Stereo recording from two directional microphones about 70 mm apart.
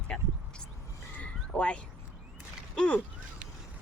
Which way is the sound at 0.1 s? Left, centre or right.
Centre.